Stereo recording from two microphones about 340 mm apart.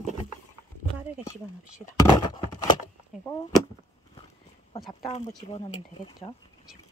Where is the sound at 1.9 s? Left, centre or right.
Centre.